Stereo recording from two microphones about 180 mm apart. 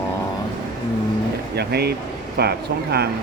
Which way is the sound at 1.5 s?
65° right (ahead or behind).